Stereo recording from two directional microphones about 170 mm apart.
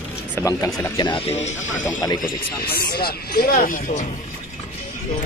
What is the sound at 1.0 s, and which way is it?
Speech, 35° left (ahead or behind).